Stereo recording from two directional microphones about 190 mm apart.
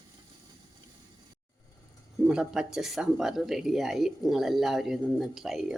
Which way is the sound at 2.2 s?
Centre (ahead or behind).